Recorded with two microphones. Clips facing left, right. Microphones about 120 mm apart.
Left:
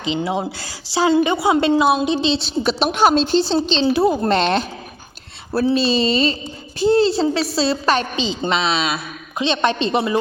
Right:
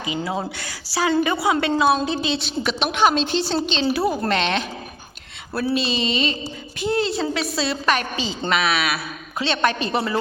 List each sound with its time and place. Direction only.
0.0 s a woman's voice: 25° left (ahead or behind)
4.4 s a woman's voice: 35° left (ahead or behind); by 10.2 s 20° left (ahead or behind)